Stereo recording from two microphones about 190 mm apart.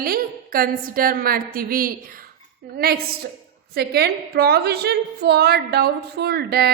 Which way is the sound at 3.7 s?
55° right (ahead or behind).